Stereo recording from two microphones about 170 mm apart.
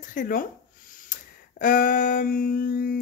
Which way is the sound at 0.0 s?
50° left (ahead or behind).